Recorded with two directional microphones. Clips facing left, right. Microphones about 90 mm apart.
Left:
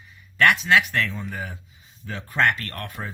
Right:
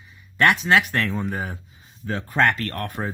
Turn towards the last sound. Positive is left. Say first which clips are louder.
# right 6 dB
turn(degrees=-40)  # may be behind; listen again after turning